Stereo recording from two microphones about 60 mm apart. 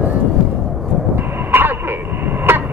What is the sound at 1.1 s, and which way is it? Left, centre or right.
Train, right.